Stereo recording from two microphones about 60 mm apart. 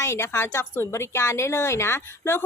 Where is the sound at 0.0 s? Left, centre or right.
Left.